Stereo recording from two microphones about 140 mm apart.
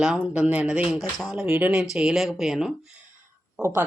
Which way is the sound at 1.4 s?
15° right (ahead or behind).